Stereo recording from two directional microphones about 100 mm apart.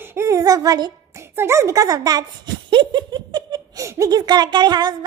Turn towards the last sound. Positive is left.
turn(degrees=-45)  # may be behind; listen again after turning